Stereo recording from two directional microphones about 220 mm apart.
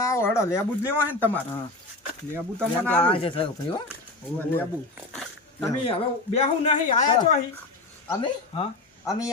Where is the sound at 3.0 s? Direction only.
25° left (ahead or behind).